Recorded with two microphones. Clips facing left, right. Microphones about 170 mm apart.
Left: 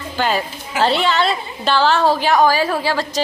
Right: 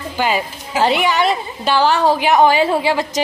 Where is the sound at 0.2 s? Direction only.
15° right (ahead or behind).